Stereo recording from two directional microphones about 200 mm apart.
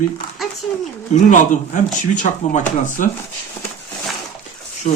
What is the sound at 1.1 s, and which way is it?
Speech, 35° left (ahead or behind).